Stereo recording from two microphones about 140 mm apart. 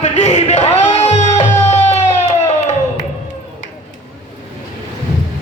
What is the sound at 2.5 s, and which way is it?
Crowd, 55° left (ahead or behind).